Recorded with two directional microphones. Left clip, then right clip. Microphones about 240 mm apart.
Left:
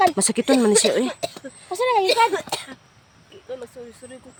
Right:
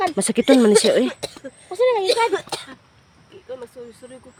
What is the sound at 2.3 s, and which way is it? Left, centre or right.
Speech, centre.